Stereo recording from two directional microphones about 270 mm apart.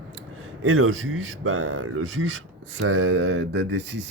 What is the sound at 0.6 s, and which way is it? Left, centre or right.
Speech, right.